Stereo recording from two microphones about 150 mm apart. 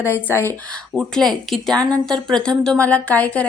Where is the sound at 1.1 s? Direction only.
Centre (ahead or behind).